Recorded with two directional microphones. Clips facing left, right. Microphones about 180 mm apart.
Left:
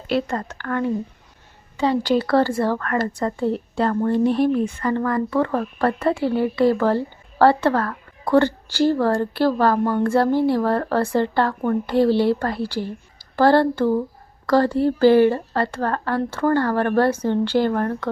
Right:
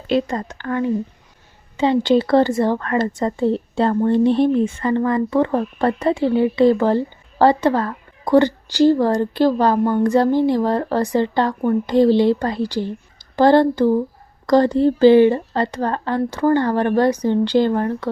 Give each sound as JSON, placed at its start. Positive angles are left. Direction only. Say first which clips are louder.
{"t": 0.1, "sound": "speech", "louder": "right 3 dB", "side_deg": -15}